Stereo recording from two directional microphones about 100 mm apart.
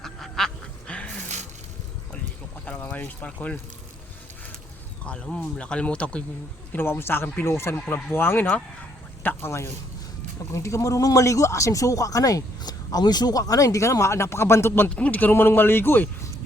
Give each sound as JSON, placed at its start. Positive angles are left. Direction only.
{"t": 0.0, "sound": "duck", "side_deg": 5}
{"t": 2.6, "sound": "speech", "side_deg": 15}
{"t": 5.0, "sound": "speech", "side_deg": 10}
{"t": 6.7, "sound": "speech", "side_deg": 25}
{"t": 14.8, "sound": "speech", "side_deg": 10}